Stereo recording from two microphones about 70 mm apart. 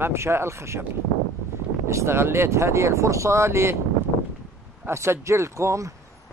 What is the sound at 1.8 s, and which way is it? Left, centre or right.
Speech, right.